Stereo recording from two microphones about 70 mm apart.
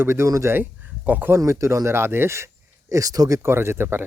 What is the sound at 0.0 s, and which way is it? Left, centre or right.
Speech, right.